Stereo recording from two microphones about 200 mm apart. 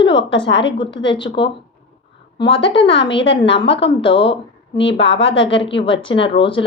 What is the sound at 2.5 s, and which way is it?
A woman's voice, 25° left (ahead or behind).